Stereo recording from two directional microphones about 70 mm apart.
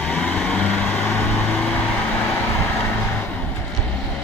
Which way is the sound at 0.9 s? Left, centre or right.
Left.